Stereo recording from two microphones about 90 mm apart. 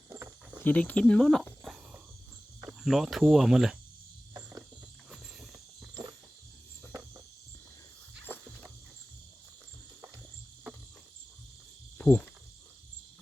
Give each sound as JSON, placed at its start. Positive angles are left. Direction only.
{"t": 0.6, "sound": "speech", "side_deg": 20}
{"t": 2.6, "sound": "speech", "side_deg": -5}
{"t": 5.9, "sound": "a sound", "side_deg": -50}
{"t": 11.9, "sound": "insect", "side_deg": 15}